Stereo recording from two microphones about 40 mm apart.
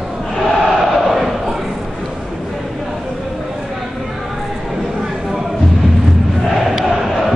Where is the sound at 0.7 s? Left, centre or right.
Centre.